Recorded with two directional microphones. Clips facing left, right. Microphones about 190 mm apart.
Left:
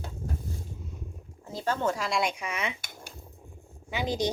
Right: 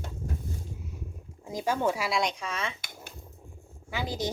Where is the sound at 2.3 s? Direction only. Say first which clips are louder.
Left 1 dB; 15° left (ahead or behind).